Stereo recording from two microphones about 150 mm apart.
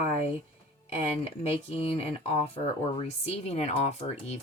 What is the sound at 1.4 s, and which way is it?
Speech, 40° left (ahead or behind).